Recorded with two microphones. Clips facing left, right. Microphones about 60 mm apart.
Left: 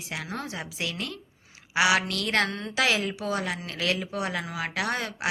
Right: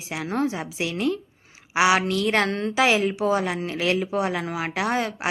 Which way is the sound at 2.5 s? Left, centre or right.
Right.